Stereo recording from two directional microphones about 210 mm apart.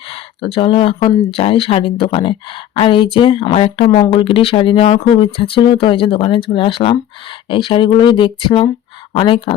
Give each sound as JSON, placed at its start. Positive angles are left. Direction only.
{"t": 0.1, "sound": "speech", "side_deg": 25}